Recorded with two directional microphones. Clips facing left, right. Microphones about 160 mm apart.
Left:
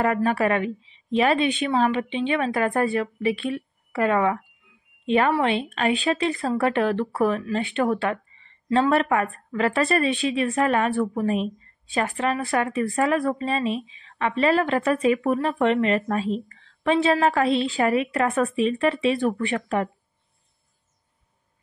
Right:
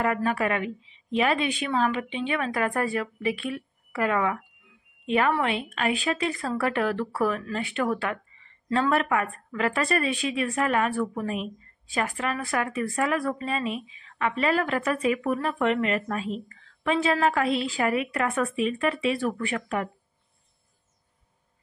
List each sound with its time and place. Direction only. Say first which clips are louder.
0.0 s a woman's voice: left 4 dB; 35° left (ahead or behind)